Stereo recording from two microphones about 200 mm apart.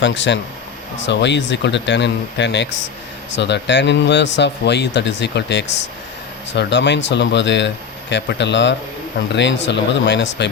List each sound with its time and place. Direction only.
0.0 s a man's voice: 65° left (ahead or behind)